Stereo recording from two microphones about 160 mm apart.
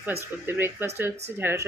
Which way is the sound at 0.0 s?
15° right (ahead or behind).